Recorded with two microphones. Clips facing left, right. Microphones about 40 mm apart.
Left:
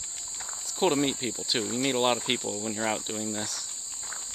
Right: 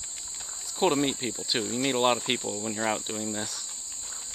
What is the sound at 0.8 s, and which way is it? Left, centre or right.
Cricket, centre.